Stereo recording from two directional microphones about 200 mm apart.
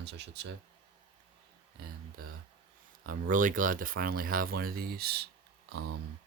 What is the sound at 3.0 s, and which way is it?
Speech, 40° right (ahead or behind).